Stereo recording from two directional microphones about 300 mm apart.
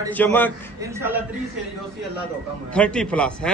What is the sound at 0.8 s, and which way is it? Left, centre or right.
Speech, centre.